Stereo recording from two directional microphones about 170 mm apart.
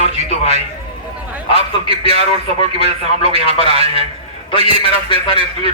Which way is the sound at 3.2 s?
35° left (ahead or behind).